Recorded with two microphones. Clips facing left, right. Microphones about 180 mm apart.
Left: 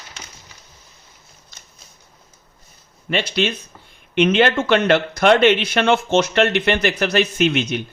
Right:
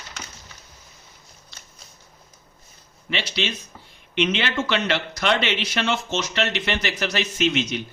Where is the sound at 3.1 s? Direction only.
50° left (ahead or behind).